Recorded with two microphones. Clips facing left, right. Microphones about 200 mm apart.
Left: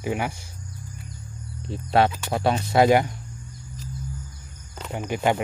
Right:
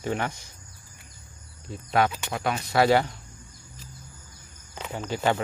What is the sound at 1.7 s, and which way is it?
Speech, 30° left (ahead or behind).